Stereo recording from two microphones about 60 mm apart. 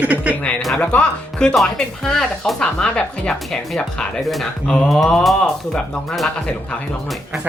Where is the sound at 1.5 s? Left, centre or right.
Centre.